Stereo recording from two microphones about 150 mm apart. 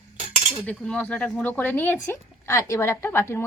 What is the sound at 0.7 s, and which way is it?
Speech, 5° left (ahead or behind).